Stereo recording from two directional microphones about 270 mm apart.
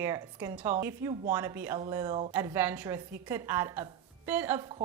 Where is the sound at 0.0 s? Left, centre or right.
Centre.